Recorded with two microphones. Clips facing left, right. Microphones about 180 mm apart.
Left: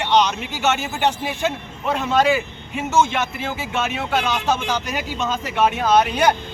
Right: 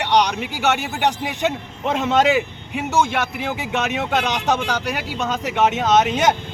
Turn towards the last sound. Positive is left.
turn(degrees=-20)  # may be behind; listen again after turning